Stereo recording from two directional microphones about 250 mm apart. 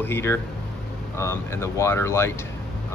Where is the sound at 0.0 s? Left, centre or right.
Centre.